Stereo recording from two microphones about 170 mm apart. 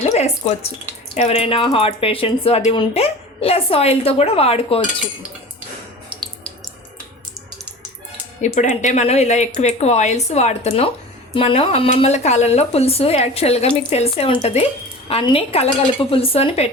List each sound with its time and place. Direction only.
0.0 s a sound: 40° left (ahead or behind)
1.1 s speech: 40° left (ahead or behind)
8.5 s speech: 45° left (ahead or behind)